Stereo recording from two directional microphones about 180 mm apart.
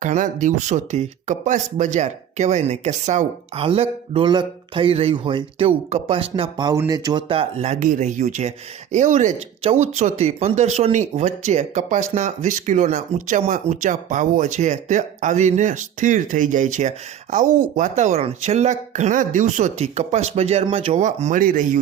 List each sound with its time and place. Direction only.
0.0 s speech: 45° right (ahead or behind)